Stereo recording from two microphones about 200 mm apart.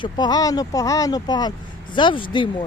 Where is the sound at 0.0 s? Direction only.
20° left (ahead or behind).